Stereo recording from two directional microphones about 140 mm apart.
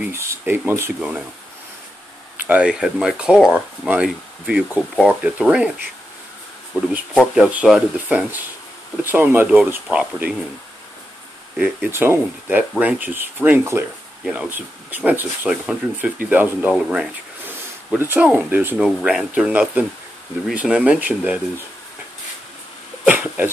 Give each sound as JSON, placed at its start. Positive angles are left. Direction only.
{"t": 0.0, "sound": "speech", "side_deg": -20}
{"t": 2.4, "sound": "speech", "side_deg": -10}
{"t": 6.7, "sound": "speech", "side_deg": -15}
{"t": 7.2, "sound": "speech", "side_deg": -5}
{"t": 11.5, "sound": "speech", "side_deg": -5}
{"t": 17.5, "sound": "speech", "side_deg": -15}
{"t": 18.9, "sound": "speech", "side_deg": 0}
{"t": 23.0, "sound": "a sound", "side_deg": -10}